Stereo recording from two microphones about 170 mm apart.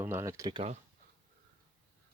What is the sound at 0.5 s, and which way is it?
Speech, 40° right (ahead or behind).